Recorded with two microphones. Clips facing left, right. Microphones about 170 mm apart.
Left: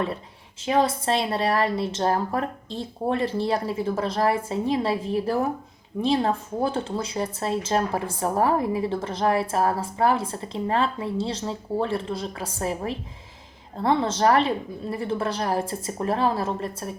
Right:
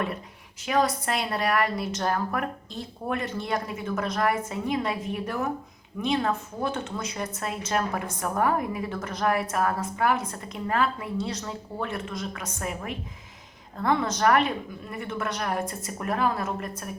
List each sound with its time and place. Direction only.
0.6 s speech: 25° left (ahead or behind)